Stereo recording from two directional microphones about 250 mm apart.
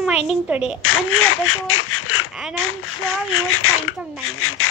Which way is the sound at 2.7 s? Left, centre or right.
Left.